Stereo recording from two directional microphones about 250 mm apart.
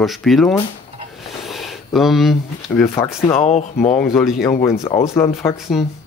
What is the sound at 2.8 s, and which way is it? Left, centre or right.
Speech, centre.